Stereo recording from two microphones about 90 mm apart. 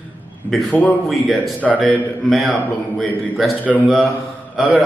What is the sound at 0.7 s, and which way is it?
Speech, 15° left (ahead or behind).